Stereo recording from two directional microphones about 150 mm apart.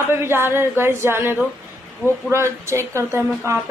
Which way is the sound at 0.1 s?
15° right (ahead or behind).